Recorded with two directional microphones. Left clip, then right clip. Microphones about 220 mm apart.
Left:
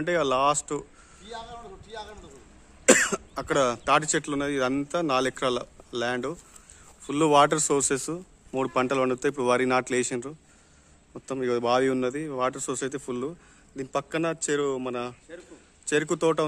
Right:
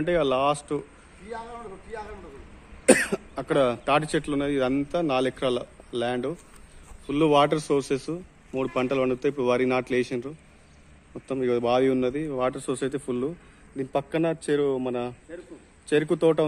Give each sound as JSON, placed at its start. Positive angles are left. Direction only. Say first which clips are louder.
{"t": 0.0, "sound": "speech", "louder": "even", "side_deg": 10}
{"t": 2.8, "sound": "speech", "louder": "even", "side_deg": 10}